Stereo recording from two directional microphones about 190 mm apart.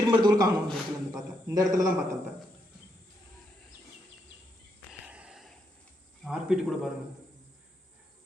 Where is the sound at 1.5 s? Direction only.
20° right (ahead or behind).